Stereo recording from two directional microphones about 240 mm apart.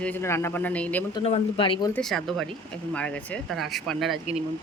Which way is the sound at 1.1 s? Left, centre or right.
Left.